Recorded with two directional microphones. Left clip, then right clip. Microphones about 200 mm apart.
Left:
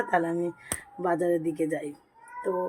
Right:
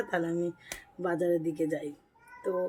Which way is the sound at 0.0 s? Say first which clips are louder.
Left 5 dB; 10° right (ahead or behind).